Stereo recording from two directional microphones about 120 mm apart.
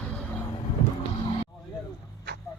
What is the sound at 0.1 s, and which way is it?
Vehicle, 10° left (ahead or behind).